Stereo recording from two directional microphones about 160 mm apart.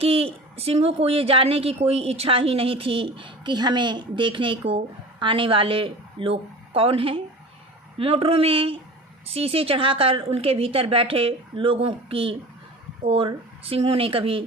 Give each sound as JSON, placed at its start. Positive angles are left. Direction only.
{"t": 0.0, "sound": "a woman's voice", "side_deg": -40}